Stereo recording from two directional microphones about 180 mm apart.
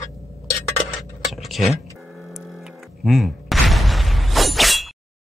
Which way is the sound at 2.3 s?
Centre (ahead or behind).